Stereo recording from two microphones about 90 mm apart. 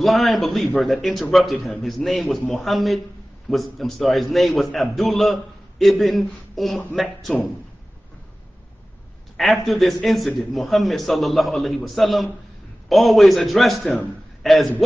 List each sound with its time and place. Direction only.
0.0 s a man's voice: centre (ahead or behind)
9.4 s a man's voice: centre (ahead or behind)